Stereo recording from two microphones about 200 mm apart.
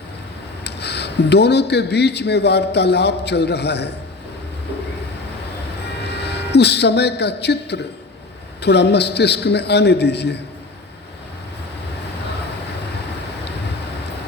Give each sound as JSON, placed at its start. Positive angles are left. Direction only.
{"t": 0.6, "sound": "speech", "side_deg": 55}
{"t": 6.0, "sound": "speech", "side_deg": 55}